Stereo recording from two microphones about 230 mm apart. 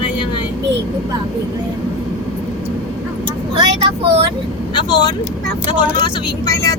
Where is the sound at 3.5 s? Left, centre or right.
Right.